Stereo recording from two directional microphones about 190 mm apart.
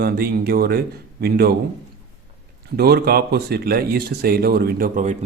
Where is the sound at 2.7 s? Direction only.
55° right (ahead or behind).